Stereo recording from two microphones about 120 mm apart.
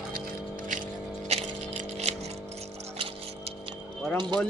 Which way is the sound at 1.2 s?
60° right (ahead or behind).